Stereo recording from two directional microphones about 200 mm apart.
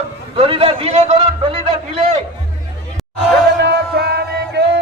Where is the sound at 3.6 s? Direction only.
55° right (ahead or behind).